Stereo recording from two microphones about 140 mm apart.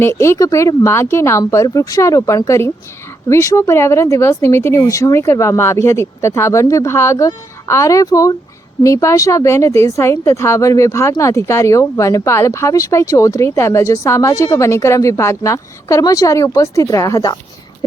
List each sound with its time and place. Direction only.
0.0 s speech: 20° left (ahead or behind)